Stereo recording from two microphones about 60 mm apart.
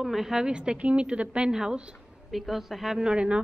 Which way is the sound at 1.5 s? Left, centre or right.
Centre.